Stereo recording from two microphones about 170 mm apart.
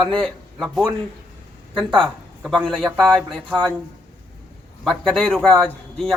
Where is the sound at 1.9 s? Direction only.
5° left (ahead or behind).